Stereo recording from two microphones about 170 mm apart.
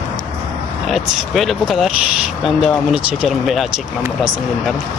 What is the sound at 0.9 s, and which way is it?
Speech, centre (ahead or behind).